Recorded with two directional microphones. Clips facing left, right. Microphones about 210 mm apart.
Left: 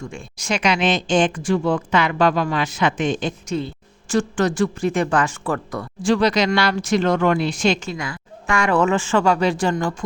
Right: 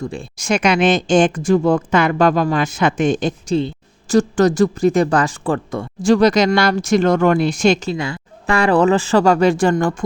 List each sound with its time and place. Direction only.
0.0 s speech: 35° right (ahead or behind)
0.3 s speech: 45° right (ahead or behind); by 5.9 s 30° right (ahead or behind)
6.0 s speech: 45° right (ahead or behind)
7.9 s speech: 30° right (ahead or behind); by 10.0 s 50° right (ahead or behind)